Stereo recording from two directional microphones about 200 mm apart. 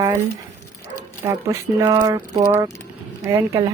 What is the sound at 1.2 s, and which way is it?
A woman's voice, 15° right (ahead or behind).